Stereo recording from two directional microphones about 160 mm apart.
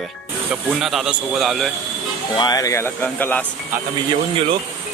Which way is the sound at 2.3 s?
25° left (ahead or behind).